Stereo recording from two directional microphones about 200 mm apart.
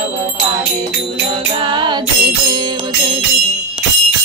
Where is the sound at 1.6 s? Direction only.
25° right (ahead or behind).